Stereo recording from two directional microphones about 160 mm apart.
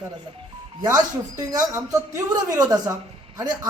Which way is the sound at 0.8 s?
25° right (ahead or behind).